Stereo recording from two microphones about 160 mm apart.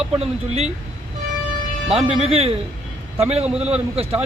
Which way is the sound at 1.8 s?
40° right (ahead or behind).